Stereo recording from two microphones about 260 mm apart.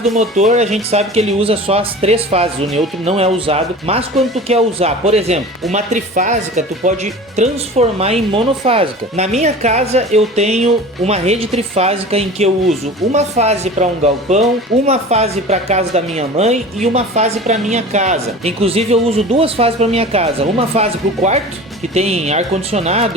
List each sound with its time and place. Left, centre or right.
0.2 s speech: right
21.9 s speech: right